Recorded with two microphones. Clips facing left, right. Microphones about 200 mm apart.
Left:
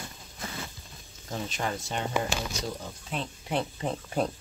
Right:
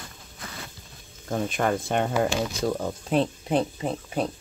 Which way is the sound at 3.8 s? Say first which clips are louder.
Right 2 dB; 5° right (ahead or behind).